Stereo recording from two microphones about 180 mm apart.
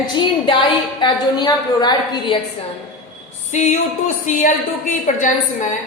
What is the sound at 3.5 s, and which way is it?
A woman's voice, 40° left (ahead or behind).